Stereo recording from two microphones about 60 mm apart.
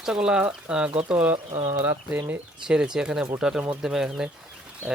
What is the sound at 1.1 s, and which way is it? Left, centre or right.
Speech, right.